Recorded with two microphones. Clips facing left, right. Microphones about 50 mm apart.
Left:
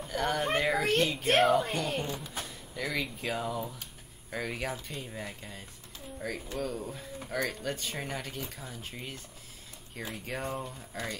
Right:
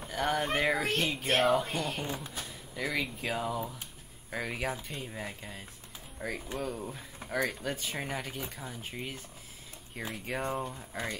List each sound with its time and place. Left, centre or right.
0.1 s a child's voice: centre